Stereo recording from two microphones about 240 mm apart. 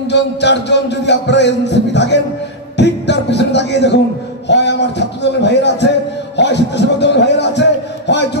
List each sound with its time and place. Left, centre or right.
0.1 s speech: left
2.8 s music: left
4.5 s speech: left